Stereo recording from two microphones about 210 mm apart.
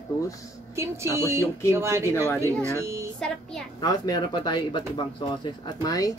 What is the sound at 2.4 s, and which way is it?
Speech, 15° right (ahead or behind).